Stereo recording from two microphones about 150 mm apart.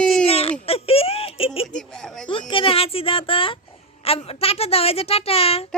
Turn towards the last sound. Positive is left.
turn(degrees=40)  # may be behind; listen again after turning